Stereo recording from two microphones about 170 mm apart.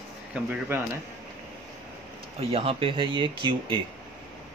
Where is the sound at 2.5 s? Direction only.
35° right (ahead or behind).